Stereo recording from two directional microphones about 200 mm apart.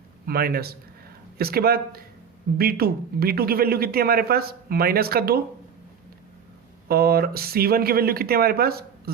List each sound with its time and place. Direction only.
0.3 s a man's voice: 50° right (ahead or behind)
6.8 s a man's voice: 50° right (ahead or behind)